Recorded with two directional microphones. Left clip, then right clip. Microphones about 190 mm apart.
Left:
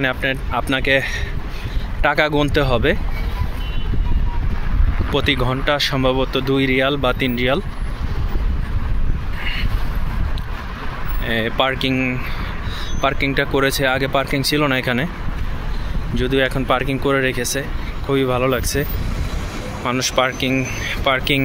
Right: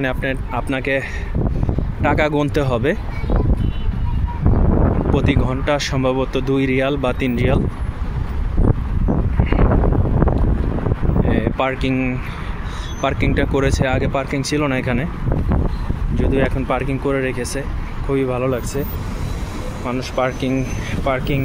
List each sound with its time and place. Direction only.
0.0 s speech: 10° right (ahead or behind)
5.1 s speech: 5° right (ahead or behind)
11.2 s speech: centre (ahead or behind)
11.9 s speech: 15° right (ahead or behind)
16.2 s speech: centre (ahead or behind)
20.3 s speech: 10° right (ahead or behind)